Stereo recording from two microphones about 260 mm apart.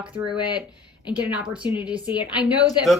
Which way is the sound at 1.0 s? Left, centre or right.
Centre.